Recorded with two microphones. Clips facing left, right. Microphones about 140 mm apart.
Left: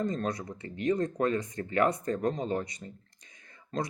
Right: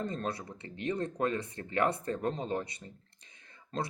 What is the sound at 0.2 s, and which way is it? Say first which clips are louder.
Speech: left 4 dB; 30° right (ahead or behind).